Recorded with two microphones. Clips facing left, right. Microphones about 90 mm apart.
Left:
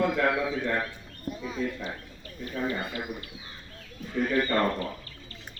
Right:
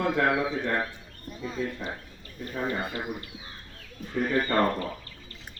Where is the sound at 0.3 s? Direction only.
20° right (ahead or behind).